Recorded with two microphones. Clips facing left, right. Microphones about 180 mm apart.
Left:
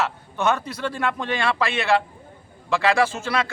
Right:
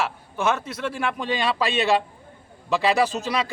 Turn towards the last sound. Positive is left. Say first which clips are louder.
# even
turn(degrees=-15)  # may be behind; listen again after turning